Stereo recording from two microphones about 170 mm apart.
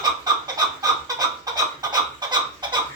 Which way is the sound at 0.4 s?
20° right (ahead or behind).